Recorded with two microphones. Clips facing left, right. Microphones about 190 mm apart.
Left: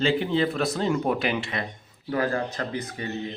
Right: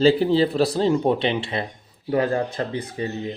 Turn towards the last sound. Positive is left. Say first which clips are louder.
# right 4 dB
turn(degrees=-30)  # may be behind; listen again after turning